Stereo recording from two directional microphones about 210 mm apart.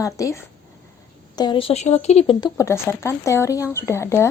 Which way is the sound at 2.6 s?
15° left (ahead or behind).